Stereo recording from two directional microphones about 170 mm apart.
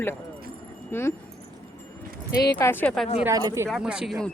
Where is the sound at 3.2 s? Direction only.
20° right (ahead or behind).